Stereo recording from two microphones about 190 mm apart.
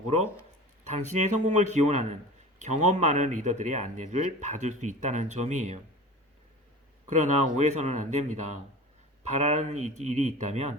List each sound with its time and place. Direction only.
0.9 s speech: 40° right (ahead or behind)
7.1 s speech: 40° right (ahead or behind)